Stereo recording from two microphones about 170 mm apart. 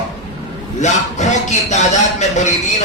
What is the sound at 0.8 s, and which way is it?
A man's voice, 45° left (ahead or behind).